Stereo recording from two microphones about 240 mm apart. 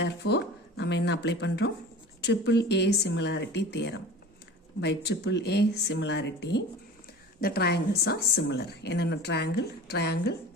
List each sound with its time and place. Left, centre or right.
0.0 s a woman's voice: left